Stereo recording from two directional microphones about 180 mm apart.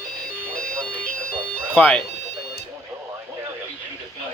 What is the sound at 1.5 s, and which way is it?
Music, 10° left (ahead or behind).